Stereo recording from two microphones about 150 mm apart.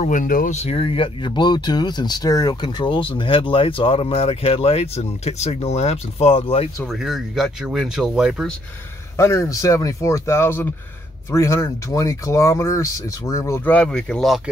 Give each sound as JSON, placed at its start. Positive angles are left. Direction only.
{"t": 0.0, "sound": "speech", "side_deg": 60}
{"t": 6.9, "sound": "speech", "side_deg": 0}
{"t": 9.1, "sound": "speech", "side_deg": 20}